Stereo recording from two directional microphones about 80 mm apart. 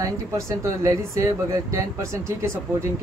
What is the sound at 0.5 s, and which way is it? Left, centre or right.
Speech, right.